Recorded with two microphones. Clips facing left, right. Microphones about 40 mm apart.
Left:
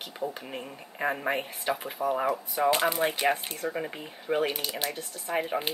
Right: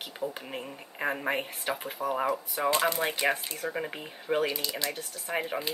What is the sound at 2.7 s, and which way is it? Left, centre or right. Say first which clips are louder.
Speech: even; centre.